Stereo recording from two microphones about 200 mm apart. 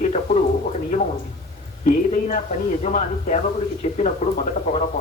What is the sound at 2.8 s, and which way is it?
Speech, 35° left (ahead or behind).